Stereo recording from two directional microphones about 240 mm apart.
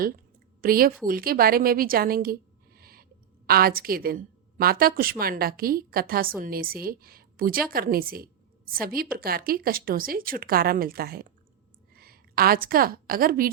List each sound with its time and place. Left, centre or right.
0.6 s a woman's voice: right